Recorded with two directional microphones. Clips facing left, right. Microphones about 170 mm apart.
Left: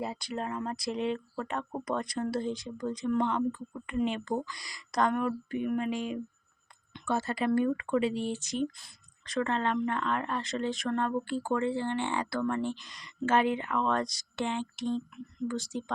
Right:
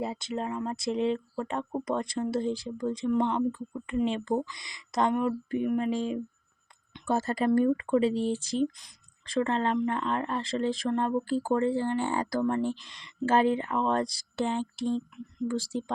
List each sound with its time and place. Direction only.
0.0 s speech: 25° right (ahead or behind)